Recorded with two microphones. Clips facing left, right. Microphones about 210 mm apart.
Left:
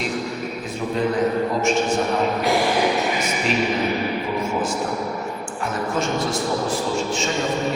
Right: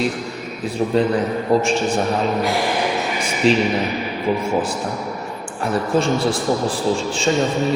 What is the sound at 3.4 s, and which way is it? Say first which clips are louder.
Speech: right 9 dB; 30° right (ahead or behind).